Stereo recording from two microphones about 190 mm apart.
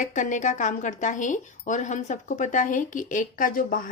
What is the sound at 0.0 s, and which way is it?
A woman's voice, 40° left (ahead or behind).